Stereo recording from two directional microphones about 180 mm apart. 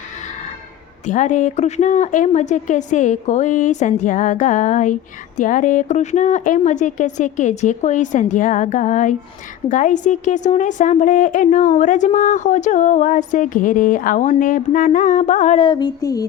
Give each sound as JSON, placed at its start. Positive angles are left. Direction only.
{"t": 1.0, "sound": "a woman's voice", "side_deg": 45}